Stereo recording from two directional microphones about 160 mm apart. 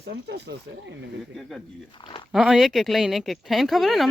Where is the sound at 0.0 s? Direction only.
90° right.